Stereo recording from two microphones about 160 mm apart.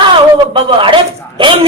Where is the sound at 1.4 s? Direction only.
30° right (ahead or behind).